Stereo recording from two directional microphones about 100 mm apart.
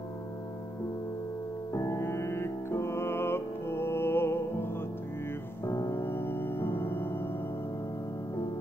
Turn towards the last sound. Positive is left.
turn(degrees=20)  # may be behind; listen again after turning